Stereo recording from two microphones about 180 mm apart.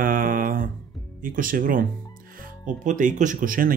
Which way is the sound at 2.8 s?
45° right (ahead or behind).